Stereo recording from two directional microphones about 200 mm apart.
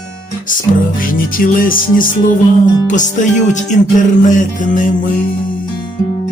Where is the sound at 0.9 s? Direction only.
45° left (ahead or behind).